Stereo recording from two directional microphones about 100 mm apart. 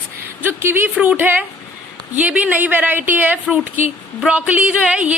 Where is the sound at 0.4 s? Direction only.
20° right (ahead or behind).